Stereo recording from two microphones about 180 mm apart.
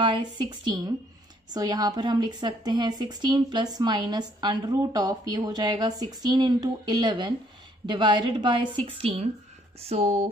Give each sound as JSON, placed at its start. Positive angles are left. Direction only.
{"t": 0.0, "sound": "a woman's voice", "side_deg": -25}